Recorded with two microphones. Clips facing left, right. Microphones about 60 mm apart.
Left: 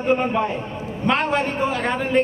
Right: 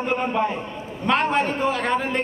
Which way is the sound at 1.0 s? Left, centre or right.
Centre.